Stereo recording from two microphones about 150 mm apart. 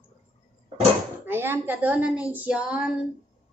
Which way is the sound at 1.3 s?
15° right (ahead or behind).